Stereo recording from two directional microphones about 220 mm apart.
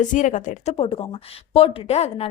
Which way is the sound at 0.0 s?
35° left (ahead or behind).